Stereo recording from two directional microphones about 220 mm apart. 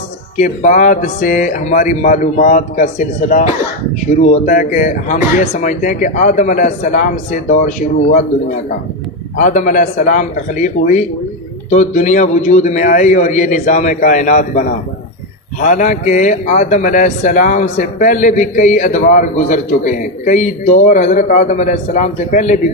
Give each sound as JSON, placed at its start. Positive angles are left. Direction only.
{"t": 0.4, "sound": "speech", "side_deg": 35}